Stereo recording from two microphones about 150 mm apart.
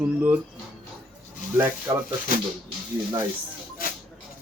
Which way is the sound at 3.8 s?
70° left (ahead or behind).